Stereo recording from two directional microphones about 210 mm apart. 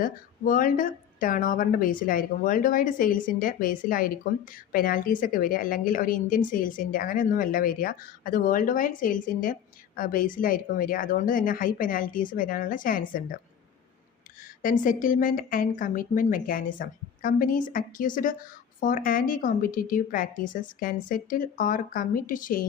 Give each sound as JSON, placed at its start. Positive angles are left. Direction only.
{"t": 0.0, "sound": "a woman's voice", "side_deg": 40}
{"t": 14.6, "sound": "a woman's voice", "side_deg": 40}